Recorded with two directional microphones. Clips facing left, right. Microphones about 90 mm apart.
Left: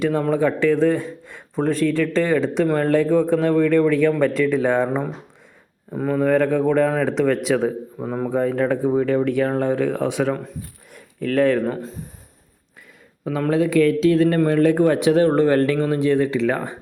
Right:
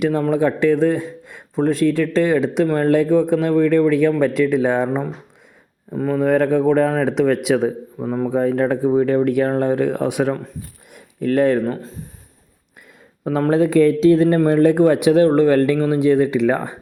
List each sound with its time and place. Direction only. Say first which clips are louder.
0.3 s speech: right 2 dB; 10° right (ahead or behind)
5.9 s speech: right 2 dB; 5° left (ahead or behind)
6.1 s speech: right 2 dB; 10° right (ahead or behind)
7.9 s speech: right 3 dB; centre (ahead or behind)
8.3 s speech: right 2 dB; 10° right (ahead or behind)
10.9 s a sound: right 2 dB; 10° right (ahead or behind)
13.2 s speech: right 3 dB; 30° right (ahead or behind)